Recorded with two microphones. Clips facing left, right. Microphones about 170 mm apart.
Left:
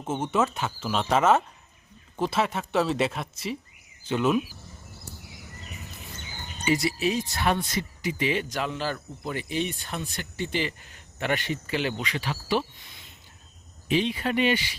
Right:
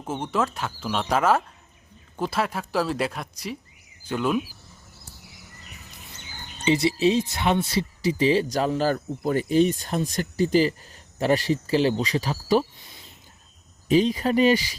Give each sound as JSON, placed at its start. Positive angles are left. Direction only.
{"t": 0.0, "sound": "speech", "side_deg": 0}
{"t": 6.7, "sound": "wind chime", "side_deg": -25}
{"t": 7.7, "sound": "speech", "side_deg": -35}
{"t": 13.8, "sound": "speech", "side_deg": -40}